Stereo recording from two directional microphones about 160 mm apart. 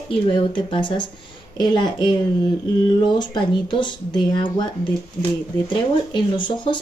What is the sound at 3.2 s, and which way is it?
Speech, 30° left (ahead or behind).